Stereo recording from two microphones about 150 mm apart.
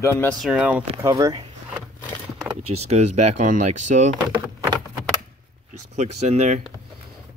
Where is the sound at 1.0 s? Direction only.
20° right (ahead or behind).